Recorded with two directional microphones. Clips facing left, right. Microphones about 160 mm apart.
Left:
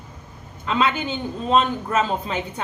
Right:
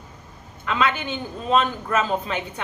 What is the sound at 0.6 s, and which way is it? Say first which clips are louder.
A woman's voice: left 2 dB; 30° left (ahead or behind).